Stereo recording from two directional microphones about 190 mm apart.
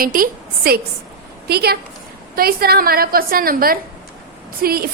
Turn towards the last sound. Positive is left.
turn(degrees=-55)  # may be behind; listen again after turning